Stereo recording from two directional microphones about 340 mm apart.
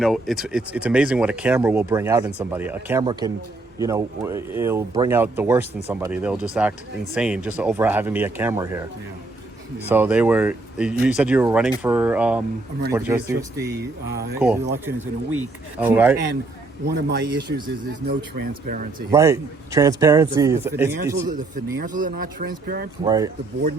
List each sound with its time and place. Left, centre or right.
0.0 s speech: centre
9.9 s a man's voice: centre
13.6 s speech: right
14.3 s speech: centre
16.9 s speech: right
19.1 s a man's voice: centre
21.8 s speech: right
23.0 s a man's voice: centre